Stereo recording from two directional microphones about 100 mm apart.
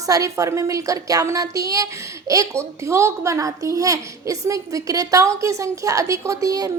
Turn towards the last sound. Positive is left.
turn(degrees=-35)  # may be behind; listen again after turning